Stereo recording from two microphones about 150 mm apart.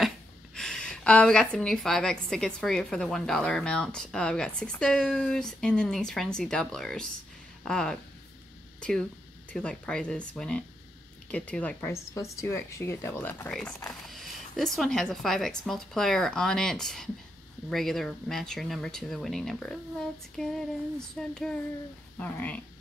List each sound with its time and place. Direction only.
0.6 s a woman's voice: 5° left (ahead or behind)
9.5 s a woman's voice: 5° left (ahead or behind)